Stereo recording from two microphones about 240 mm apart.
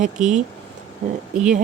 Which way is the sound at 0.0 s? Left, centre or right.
Right.